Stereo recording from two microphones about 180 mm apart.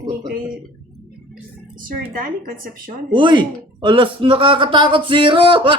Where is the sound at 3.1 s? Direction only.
25° right (ahead or behind).